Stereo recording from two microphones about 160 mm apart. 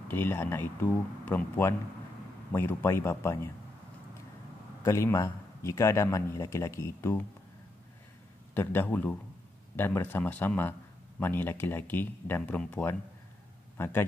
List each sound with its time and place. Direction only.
0.1 s a man's voice: 15° left (ahead or behind)
4.8 s a man's voice: 15° left (ahead or behind)
8.5 s a man's voice: 10° left (ahead or behind)